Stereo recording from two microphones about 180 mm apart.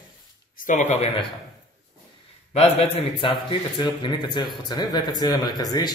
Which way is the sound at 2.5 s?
35° left (ahead or behind).